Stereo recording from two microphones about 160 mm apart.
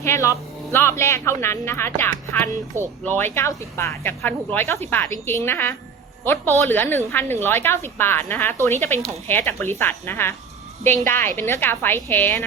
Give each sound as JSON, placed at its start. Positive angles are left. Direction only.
{"t": 0.0, "sound": "speech", "side_deg": 20}